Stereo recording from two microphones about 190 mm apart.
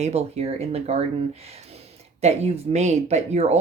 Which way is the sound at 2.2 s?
35° right (ahead or behind).